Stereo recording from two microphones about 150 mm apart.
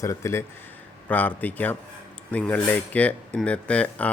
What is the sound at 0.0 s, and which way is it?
Speech, 20° left (ahead or behind).